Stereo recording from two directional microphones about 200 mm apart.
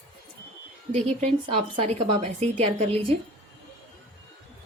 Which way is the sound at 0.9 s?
35° right (ahead or behind).